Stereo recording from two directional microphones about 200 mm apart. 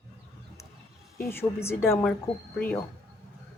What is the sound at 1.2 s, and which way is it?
Speech, 10° left (ahead or behind).